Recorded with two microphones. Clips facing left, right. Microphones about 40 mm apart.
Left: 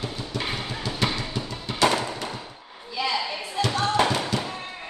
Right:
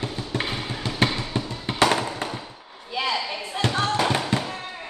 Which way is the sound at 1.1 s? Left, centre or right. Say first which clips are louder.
Right 2 dB; right.